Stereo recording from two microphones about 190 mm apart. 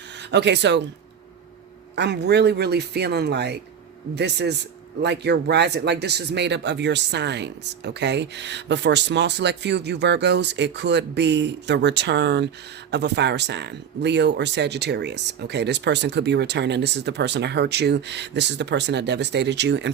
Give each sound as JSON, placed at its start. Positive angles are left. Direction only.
{"t": 0.3, "sound": "speech", "side_deg": -65}
{"t": 2.0, "sound": "speech", "side_deg": -65}